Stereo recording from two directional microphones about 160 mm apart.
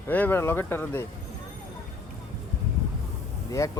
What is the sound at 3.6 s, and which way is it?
Speech, 20° left (ahead or behind).